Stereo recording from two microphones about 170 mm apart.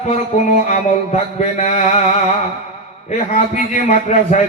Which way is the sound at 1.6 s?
40° left (ahead or behind).